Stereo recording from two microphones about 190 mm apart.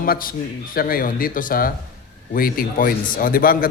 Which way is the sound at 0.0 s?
50° left (ahead or behind).